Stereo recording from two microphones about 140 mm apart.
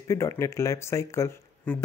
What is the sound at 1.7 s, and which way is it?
Speech, 10° left (ahead or behind).